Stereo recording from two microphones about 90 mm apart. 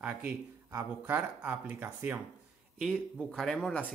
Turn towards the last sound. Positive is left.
turn(degrees=10)  # may be behind; listen again after turning